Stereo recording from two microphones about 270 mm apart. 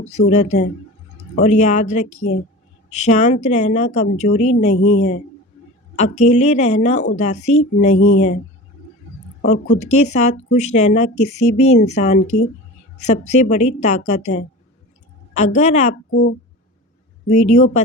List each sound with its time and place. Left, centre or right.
0.0 s speech: left
9.5 s speech: left
17.2 s speech: left